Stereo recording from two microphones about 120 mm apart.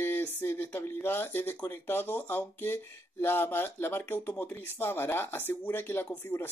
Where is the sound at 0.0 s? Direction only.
15° left (ahead or behind).